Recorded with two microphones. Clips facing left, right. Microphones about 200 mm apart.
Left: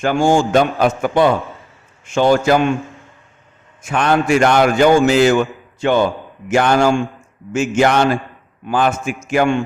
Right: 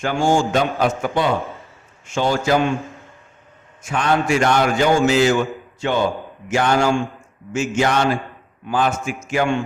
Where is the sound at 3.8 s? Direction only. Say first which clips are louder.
Left 3 dB; 60° left (ahead or behind).